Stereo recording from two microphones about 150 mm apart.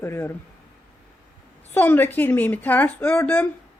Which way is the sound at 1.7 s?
15° left (ahead or behind).